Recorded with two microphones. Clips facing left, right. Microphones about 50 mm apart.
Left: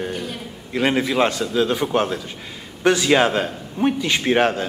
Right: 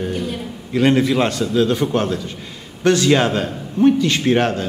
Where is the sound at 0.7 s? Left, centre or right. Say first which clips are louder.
Right 4 dB; centre.